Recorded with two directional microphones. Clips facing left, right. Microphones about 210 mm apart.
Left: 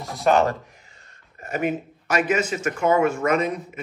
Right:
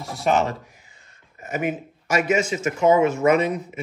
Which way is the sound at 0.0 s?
Centre (ahead or behind).